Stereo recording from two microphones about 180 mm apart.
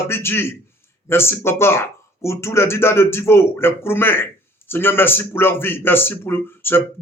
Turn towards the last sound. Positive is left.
turn(degrees=10)  # may be behind; listen again after turning